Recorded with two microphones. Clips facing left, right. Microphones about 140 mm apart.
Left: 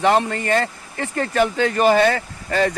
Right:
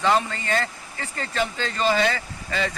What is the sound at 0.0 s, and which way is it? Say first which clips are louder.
Speech: left 4 dB; 65° left (ahead or behind).